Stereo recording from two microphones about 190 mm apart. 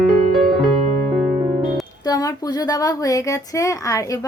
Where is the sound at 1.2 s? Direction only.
Centre (ahead or behind).